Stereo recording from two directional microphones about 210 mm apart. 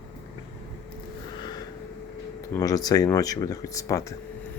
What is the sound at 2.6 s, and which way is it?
Speech, 15° left (ahead or behind).